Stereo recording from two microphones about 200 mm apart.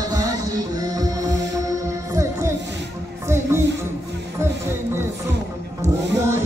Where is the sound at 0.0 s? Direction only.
20° right (ahead or behind).